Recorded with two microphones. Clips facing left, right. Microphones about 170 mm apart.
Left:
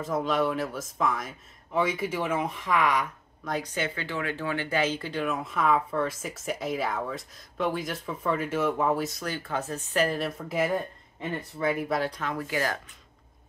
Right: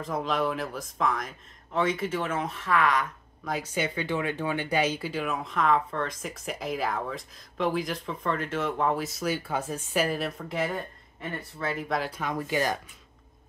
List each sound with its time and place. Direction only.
0.0 s speech: centre (ahead or behind)
3.4 s speech: 5° right (ahead or behind)
11.1 s speech: 15° left (ahead or behind)
11.9 s speech: centre (ahead or behind)
12.2 s speech: 15° right (ahead or behind)